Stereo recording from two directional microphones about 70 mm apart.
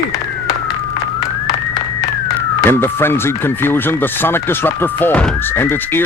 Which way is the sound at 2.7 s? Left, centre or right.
Left.